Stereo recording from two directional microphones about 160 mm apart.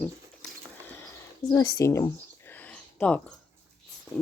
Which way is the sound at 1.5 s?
25° left (ahead or behind).